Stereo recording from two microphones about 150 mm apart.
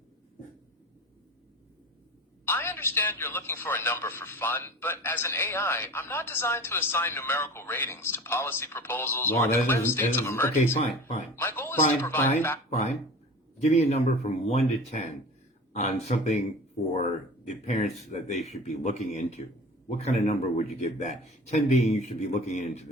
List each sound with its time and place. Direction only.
2.5 s a man's voice: 15° left (ahead or behind)
13.6 s speech: 50° left (ahead or behind)